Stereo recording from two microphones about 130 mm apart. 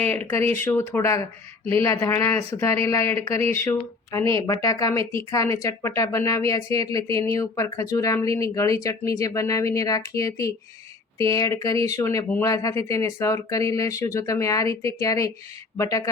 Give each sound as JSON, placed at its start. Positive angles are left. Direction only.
{"t": 0.0, "sound": "speech", "side_deg": 15}